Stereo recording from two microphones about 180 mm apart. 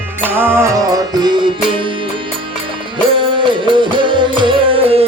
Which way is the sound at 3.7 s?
25° right (ahead or behind).